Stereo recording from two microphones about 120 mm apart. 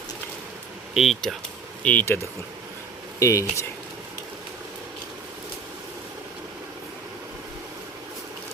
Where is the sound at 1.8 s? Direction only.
15° left (ahead or behind).